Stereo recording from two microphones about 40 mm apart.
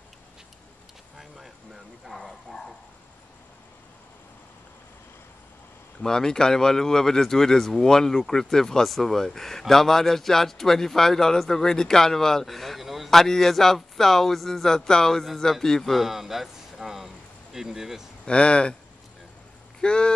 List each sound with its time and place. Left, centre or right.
1.1 s vehicle: centre
2.0 s speech: centre
5.9 s speech: centre
12.4 s a sound: centre
13.1 s speech: centre
18.2 s speech: left
19.8 s speech: left